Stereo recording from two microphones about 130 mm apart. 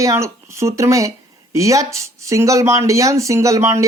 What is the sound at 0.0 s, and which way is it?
Speech, 25° right (ahead or behind).